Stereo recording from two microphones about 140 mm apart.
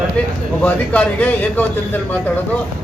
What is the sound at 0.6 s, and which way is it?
Speech, 10° left (ahead or behind).